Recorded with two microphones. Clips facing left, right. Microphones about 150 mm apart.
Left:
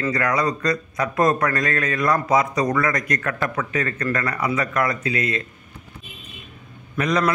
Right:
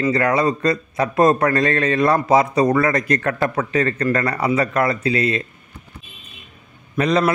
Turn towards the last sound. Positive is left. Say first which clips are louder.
# right 4 dB
turn(degrees=-30)  # may be behind; listen again after turning